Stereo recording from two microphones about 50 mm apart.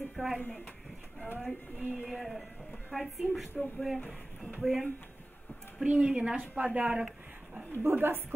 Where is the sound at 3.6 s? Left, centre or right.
Centre.